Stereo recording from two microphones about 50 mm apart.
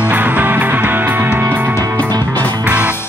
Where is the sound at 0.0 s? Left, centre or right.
Right.